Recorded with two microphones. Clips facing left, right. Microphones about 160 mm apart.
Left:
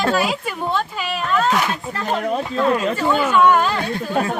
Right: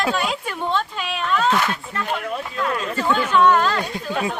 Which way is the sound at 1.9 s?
40° left (ahead or behind).